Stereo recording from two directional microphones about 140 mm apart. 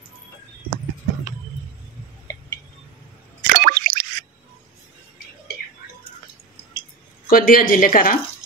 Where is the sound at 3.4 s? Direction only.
90° right.